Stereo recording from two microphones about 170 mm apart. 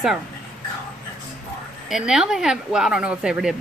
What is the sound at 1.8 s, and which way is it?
Speech, 5° right (ahead or behind).